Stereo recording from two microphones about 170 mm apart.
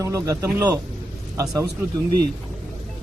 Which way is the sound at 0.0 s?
20° right (ahead or behind).